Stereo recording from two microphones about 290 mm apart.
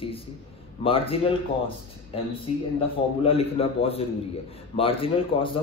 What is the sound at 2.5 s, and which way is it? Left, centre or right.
Speech, left.